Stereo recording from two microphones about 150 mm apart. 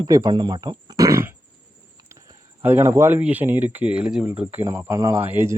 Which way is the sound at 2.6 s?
20° right (ahead or behind).